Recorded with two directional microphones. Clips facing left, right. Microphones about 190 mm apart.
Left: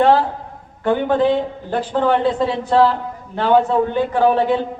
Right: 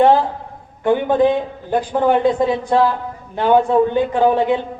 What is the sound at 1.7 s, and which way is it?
A man's voice, 15° right (ahead or behind).